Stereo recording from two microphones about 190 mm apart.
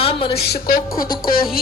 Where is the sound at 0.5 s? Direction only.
50° left (ahead or behind).